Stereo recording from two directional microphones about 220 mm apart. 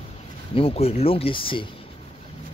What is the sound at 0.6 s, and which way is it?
Speech, 25° left (ahead or behind).